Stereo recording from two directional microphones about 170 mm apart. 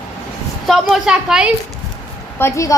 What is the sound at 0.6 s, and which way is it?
Speech, centre (ahead or behind).